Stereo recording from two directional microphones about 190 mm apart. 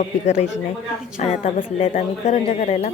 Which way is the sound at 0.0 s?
40° left (ahead or behind).